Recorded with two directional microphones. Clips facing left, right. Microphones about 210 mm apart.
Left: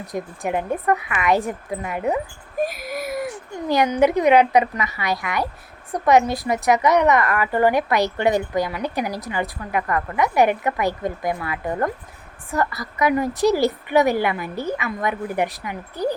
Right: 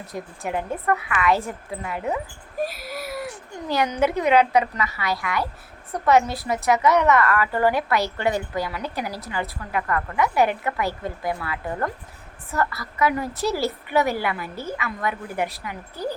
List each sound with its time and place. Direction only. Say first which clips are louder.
0.0 s a woman's voice: left 4 dB; 15° left (ahead or behind)
2.6 s a sound: left 4 dB; 15° left (ahead or behind)
3.7 s a woman's voice: left 4 dB; 15° left (ahead or behind)